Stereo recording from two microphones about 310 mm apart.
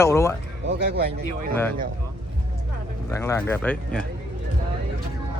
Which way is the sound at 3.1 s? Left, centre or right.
Centre.